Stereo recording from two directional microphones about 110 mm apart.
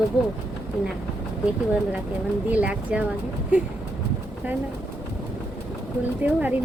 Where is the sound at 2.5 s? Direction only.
10° right (ahead or behind).